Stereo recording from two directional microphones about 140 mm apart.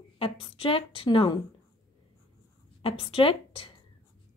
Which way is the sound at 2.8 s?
40° left (ahead or behind).